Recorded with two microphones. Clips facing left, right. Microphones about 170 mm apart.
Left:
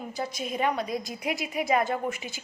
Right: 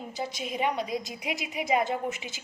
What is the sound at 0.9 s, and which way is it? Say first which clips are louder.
Speech: left 2 dB; 45° left (ahead or behind).